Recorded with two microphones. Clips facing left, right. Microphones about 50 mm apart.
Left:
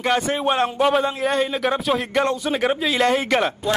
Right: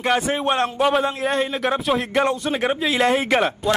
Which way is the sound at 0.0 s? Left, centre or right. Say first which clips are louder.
Even; centre.